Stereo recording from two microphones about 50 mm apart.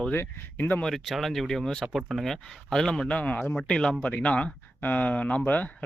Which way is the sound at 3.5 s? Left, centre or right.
Centre.